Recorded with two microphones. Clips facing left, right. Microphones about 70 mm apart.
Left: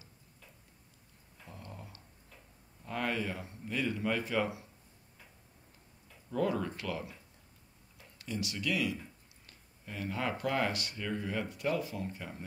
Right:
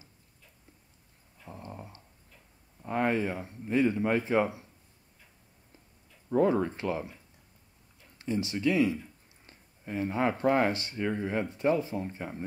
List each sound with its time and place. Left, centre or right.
1.4 s dog: right
2.8 s speech: right
6.3 s speech: right
8.2 s speech: right